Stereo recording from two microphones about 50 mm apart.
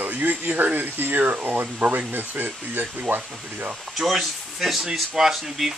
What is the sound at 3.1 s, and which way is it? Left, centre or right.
Speech, right.